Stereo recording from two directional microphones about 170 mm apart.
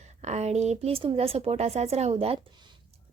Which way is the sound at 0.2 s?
40° right (ahead or behind).